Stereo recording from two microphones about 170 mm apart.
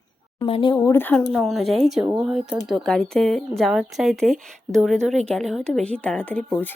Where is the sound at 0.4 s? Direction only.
30° left (ahead or behind); by 2.0 s centre (ahead or behind).